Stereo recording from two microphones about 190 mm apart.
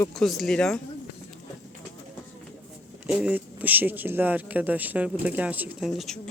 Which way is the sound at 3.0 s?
5° right (ahead or behind).